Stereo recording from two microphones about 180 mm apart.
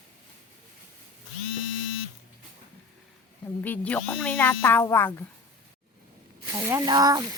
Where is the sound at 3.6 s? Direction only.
10° left (ahead or behind).